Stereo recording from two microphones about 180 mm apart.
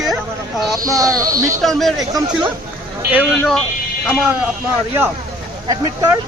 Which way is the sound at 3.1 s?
10° right (ahead or behind).